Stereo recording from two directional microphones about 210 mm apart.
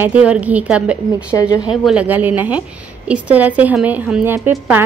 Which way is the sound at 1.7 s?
5° right (ahead or behind).